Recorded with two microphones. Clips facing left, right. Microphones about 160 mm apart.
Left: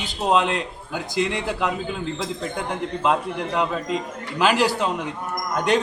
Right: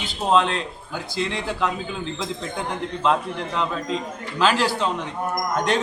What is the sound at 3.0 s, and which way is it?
A man's voice, 10° left (ahead or behind).